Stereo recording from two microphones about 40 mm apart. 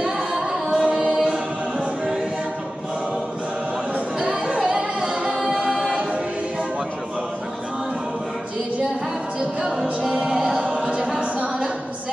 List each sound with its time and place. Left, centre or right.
0.3 s singing: centre
0.9 s choir: centre
3.9 s chatter: right
4.7 s music: centre
5.5 s a capella: centre
9.6 s music: centre
10.3 s choir: centre
10.6 s a capella: right
11.1 s a sound: right